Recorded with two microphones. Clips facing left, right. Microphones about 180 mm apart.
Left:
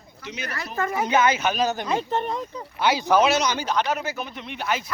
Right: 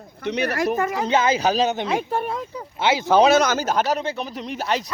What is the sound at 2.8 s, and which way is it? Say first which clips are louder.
Speech: right 3 dB; 25° right (ahead or behind).